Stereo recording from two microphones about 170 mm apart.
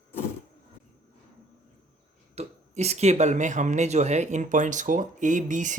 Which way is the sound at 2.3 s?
40° right (ahead or behind).